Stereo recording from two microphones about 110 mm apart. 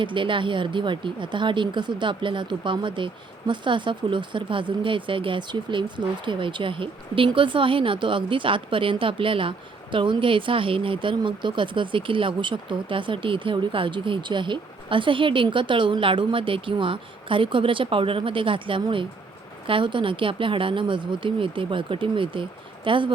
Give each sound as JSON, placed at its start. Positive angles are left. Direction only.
{"t": 0.0, "sound": "a woman's voice", "side_deg": -50}